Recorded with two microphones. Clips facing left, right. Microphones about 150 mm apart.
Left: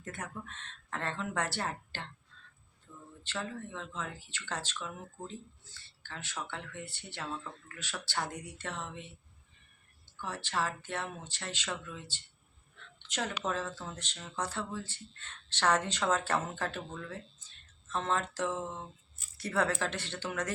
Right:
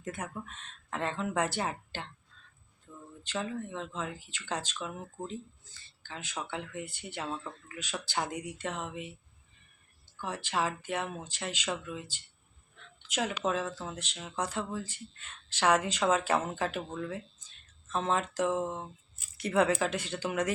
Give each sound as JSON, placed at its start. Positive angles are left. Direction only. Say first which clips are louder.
{"t": 0.0, "sound": "speech", "louder": "right 4 dB", "side_deg": -10}
{"t": 2.9, "sound": "a sound", "louder": "right 3 dB", "side_deg": -15}
{"t": 3.2, "sound": "speech", "louder": "right 4 dB", "side_deg": -15}
{"t": 10.2, "sound": "speech", "louder": "right 3 dB", "side_deg": -15}